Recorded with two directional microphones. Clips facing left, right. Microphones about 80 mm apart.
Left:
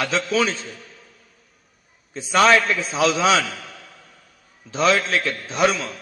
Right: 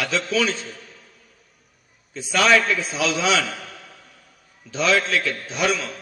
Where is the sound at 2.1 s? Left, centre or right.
Left.